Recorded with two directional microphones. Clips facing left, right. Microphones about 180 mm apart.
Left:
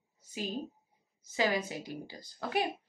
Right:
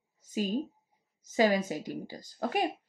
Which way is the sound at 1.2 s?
45° right (ahead or behind).